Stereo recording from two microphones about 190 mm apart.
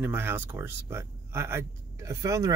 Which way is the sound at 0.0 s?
10° right (ahead or behind).